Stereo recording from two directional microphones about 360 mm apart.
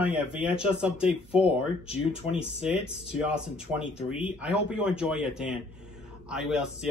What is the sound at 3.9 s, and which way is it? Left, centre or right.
Speech, centre.